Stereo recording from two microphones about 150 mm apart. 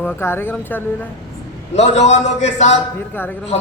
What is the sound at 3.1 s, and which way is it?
Speech, 15° left (ahead or behind).